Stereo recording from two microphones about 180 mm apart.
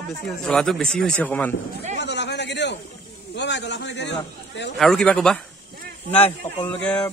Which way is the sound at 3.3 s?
75° left (ahead or behind).